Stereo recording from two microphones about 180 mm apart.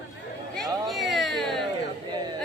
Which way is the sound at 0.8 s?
Centre (ahead or behind).